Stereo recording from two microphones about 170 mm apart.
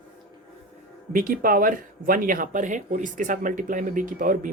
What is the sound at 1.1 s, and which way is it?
Speech, 55° right (ahead or behind).